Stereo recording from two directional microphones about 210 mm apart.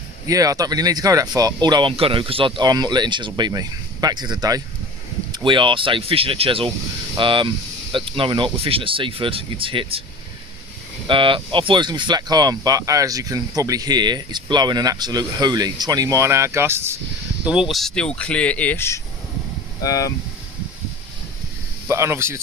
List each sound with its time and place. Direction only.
0.3 s speech: 15° right (ahead or behind)
11.1 s speech: 25° right (ahead or behind); by 20.1 s 15° left (ahead or behind)
21.8 s speech: 15° right (ahead or behind)